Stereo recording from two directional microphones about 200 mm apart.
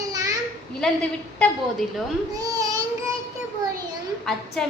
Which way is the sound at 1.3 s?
5° left (ahead or behind).